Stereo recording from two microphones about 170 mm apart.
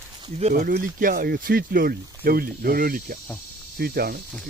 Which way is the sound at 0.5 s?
65° right (ahead or behind).